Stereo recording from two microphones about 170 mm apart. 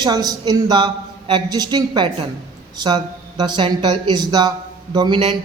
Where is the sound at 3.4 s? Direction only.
25° right (ahead or behind).